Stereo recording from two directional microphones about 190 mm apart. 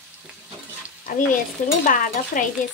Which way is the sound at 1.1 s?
45° left (ahead or behind).